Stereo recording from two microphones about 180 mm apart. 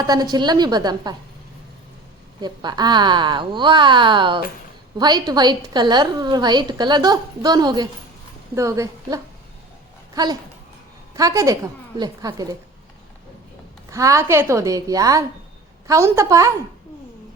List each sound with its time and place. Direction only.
0.0 s a woman's voice: 20° right (ahead or behind)
2.4 s a woman's voice: 25° right (ahead or behind)
13.9 s a woman's voice: 15° right (ahead or behind)